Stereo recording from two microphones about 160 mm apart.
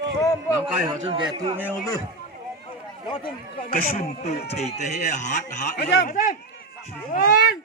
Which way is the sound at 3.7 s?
60° left (ahead or behind).